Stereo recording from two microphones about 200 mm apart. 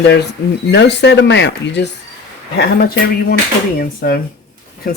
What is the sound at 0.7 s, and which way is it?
Speech, 60° left (ahead or behind).